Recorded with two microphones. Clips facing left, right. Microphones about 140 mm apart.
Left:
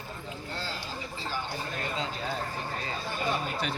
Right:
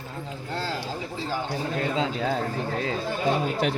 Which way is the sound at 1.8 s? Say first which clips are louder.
Right 9 dB; 90° right.